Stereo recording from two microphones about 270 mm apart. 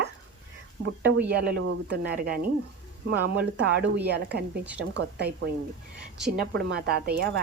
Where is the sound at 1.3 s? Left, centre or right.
Right.